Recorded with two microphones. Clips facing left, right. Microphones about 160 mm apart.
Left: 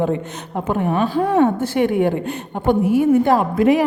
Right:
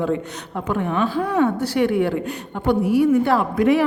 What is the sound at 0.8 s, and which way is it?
Speech, 40° left (ahead or behind).